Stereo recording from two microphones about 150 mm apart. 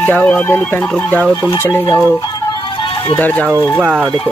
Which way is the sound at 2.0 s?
20° left (ahead or behind).